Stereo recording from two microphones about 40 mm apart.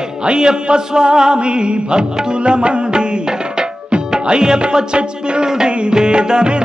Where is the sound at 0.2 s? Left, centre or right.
Right.